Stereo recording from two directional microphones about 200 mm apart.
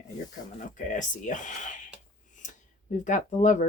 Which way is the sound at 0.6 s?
40° left (ahead or behind).